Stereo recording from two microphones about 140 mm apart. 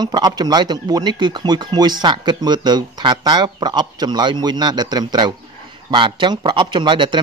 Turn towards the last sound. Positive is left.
turn(degrees=-35)  # may be behind; listen again after turning